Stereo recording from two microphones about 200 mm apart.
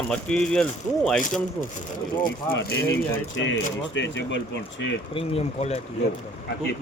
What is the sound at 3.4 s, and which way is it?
Speech, 65° left (ahead or behind).